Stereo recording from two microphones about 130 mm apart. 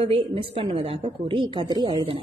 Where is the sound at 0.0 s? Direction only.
45° right (ahead or behind).